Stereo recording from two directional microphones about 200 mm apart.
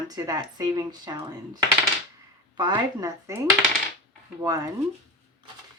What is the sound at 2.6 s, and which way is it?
Speech, 20° right (ahead or behind).